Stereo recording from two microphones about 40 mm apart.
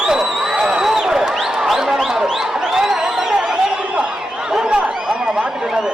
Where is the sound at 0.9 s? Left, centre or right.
Centre.